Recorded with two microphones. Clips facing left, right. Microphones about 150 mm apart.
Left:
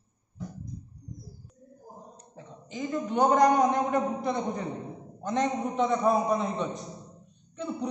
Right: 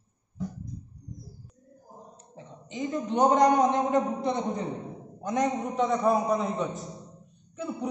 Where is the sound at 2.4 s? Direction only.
20° right (ahead or behind).